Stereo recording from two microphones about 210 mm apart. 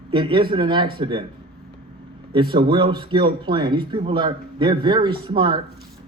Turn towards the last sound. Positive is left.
turn(degrees=-25)  # may be behind; listen again after turning